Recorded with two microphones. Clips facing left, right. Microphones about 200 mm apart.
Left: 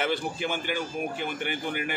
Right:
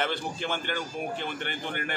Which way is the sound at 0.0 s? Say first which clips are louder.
Left 2 dB; 10° left (ahead or behind).